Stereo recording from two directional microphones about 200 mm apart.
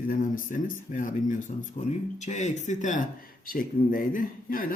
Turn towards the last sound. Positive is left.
turn(degrees=45)  # may be behind; listen again after turning